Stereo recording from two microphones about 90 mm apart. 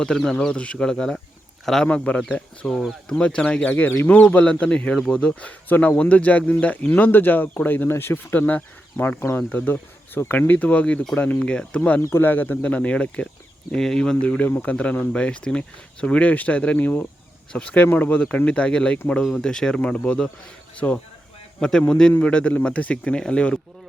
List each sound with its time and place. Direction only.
0.0 s a man's voice: 5° left (ahead or behind)